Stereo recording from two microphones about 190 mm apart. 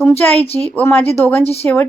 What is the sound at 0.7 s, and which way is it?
Speech, 10° left (ahead or behind).